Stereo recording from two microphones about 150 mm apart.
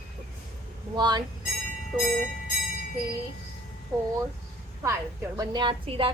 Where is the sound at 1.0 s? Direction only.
30° right (ahead or behind).